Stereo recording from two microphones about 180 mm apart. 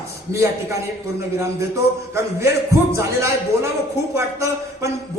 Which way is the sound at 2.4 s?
15° right (ahead or behind).